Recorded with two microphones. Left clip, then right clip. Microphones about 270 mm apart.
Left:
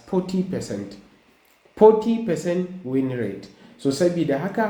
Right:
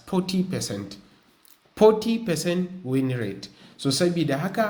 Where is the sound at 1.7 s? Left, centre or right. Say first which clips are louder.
Left 3 dB; right.